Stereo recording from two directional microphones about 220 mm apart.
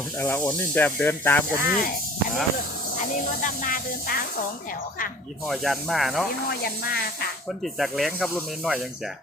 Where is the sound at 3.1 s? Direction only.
40° left (ahead or behind).